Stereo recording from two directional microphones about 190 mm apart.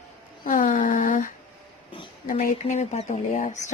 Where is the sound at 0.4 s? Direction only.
45° left (ahead or behind).